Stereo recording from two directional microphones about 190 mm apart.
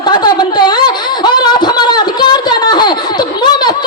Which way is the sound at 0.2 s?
20° left (ahead or behind).